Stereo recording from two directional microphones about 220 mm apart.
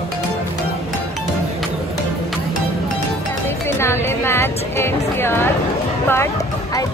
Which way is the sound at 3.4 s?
10° left (ahead or behind).